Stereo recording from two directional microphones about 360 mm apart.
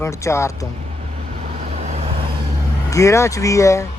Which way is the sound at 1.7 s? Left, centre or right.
Centre.